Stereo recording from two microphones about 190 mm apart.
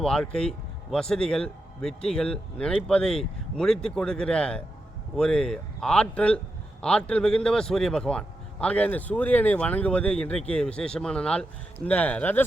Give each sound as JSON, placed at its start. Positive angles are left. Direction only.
{"t": 0.0, "sound": "speech", "side_deg": 5}